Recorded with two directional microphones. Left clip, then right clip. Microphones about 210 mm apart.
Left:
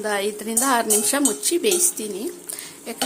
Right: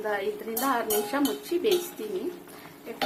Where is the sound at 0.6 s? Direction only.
55° left (ahead or behind).